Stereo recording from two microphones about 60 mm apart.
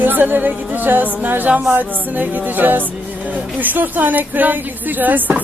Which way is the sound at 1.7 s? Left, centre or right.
Right.